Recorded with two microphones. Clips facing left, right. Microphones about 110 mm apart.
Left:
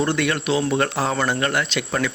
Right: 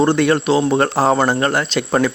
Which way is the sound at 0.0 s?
35° right (ahead or behind).